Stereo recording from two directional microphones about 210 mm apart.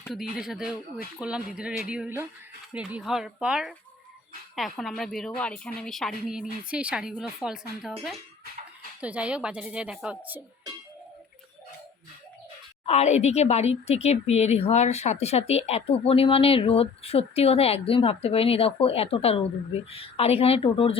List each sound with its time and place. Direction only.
0.1 s a woman's voice: centre (ahead or behind)
12.8 s speech: 30° left (ahead or behind)